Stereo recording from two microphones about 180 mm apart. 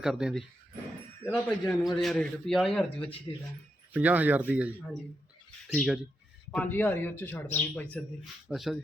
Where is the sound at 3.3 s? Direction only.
25° left (ahead or behind).